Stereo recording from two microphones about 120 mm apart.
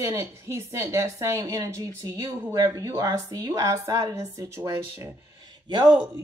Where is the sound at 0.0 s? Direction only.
25° right (ahead or behind).